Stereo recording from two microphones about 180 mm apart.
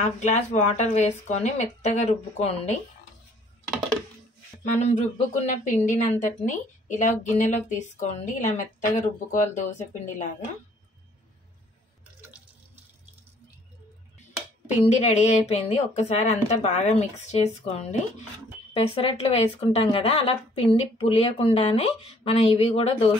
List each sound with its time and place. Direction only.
0.0 s speech: 40° left (ahead or behind)
4.6 s speech: 40° left (ahead or behind)
14.9 s speech: 40° left (ahead or behind)